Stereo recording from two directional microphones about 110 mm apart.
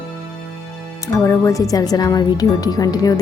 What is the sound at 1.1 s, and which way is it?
Speech, 30° left (ahead or behind).